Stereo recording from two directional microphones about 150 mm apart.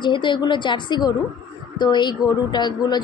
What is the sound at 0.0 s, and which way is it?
A woman's voice, 30° left (ahead or behind).